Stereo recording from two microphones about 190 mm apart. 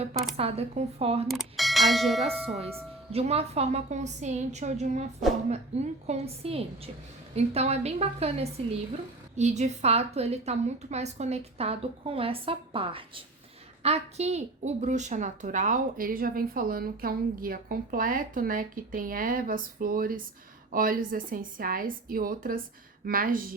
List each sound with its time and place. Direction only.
0.3 s a woman's voice: 30° right (ahead or behind)
1.3 s bell: centre (ahead or behind)
3.1 s a woman's voice: 30° right (ahead or behind); by 23.4 s 45° right (ahead or behind)